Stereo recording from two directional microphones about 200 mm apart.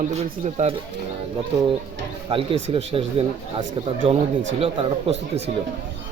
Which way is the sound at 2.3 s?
30° right (ahead or behind).